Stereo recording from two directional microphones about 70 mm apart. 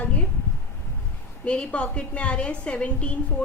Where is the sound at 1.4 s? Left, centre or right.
Centre.